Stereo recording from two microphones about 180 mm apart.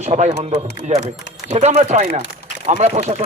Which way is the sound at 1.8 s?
40° right (ahead or behind).